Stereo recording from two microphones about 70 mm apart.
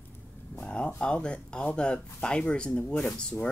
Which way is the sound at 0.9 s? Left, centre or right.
Centre.